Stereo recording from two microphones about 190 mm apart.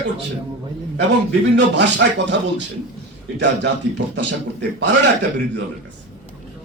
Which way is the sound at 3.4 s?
65° right (ahead or behind).